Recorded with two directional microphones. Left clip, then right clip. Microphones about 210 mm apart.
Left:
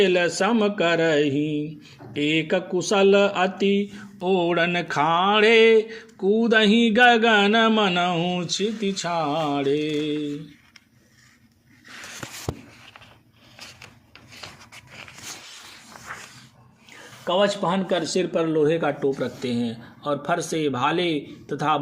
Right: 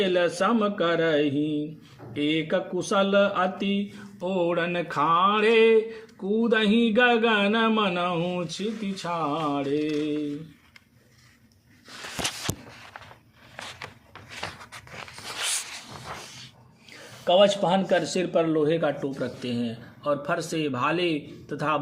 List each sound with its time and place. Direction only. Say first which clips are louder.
0.0 s speech: left 3 dB; 20° left (ahead or behind)
17.2 s speech: right 2 dB; centre (ahead or behind)
18.3 s speech: left 1 dB; 15° left (ahead or behind)